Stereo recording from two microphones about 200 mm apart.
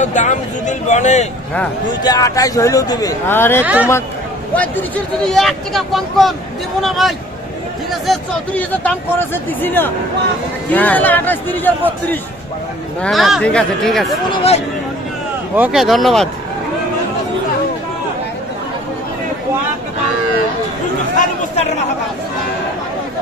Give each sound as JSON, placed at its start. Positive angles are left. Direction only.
{"t": 0.0, "sound": "speech", "side_deg": 40}
{"t": 2.0, "sound": "speech", "side_deg": 15}
{"t": 3.6, "sound": "speech", "side_deg": -10}
{"t": 4.6, "sound": "speech", "side_deg": 5}
{"t": 13.0, "sound": "speech", "side_deg": 0}
{"t": 14.3, "sound": "speech", "side_deg": 30}
{"t": 15.5, "sound": "speech", "side_deg": -5}